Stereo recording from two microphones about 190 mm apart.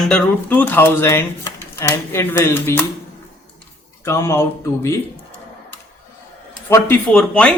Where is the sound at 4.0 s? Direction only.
15° left (ahead or behind).